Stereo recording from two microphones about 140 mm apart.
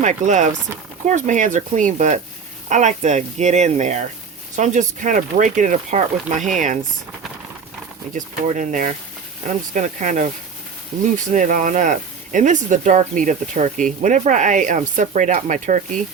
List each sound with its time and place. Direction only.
0.0 s speech: 60° right (ahead or behind)
8.1 s speech: 65° right (ahead or behind)